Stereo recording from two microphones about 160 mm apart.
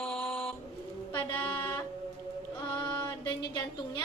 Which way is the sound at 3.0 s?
30° left (ahead or behind).